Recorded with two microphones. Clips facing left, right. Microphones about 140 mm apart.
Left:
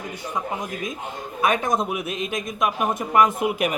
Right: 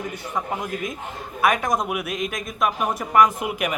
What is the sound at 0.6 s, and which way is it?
A man's voice, 20° left (ahead or behind).